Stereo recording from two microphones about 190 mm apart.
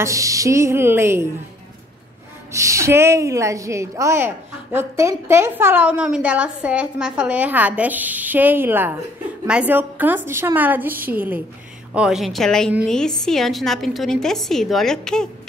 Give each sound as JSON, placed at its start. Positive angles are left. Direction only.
{"t": 0.0, "sound": "a woman's voice", "side_deg": -15}
{"t": 2.5, "sound": "a woman's voice", "side_deg": -15}